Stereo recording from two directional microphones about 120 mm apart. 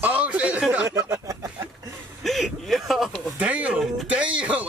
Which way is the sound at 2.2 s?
Centre (ahead or behind).